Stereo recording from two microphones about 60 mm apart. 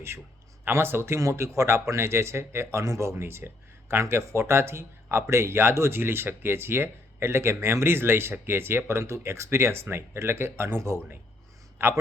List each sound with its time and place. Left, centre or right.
0.6 s speech: right
5.0 s speech: right
5.3 s speech: right